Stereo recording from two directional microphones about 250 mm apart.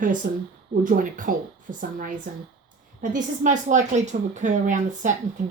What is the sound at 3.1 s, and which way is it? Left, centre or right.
A woman's voice, right.